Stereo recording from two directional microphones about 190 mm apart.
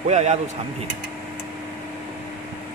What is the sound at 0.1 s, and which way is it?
Speech, 35° right (ahead or behind).